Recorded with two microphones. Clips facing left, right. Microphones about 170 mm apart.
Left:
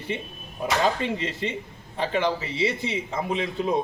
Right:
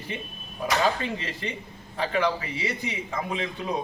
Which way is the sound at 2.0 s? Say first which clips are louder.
Left 1 dB; 25° left (ahead or behind).